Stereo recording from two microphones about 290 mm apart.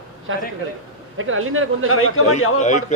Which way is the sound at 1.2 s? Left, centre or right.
Right.